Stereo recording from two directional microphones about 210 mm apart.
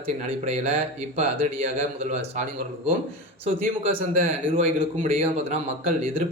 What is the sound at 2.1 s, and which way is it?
Speech, 30° right (ahead or behind).